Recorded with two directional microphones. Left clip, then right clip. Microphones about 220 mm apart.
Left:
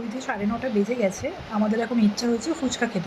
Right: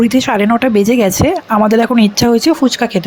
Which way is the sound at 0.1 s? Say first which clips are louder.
Right 16 dB; 45° right (ahead or behind).